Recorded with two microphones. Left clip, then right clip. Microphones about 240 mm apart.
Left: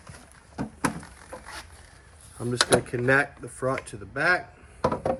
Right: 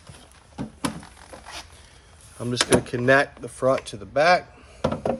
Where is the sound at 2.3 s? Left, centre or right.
Centre.